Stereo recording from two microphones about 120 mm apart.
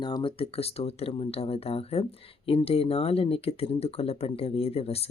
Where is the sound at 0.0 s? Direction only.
45° left (ahead or behind).